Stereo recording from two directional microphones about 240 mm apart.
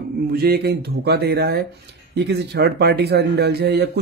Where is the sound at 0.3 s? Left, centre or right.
Right.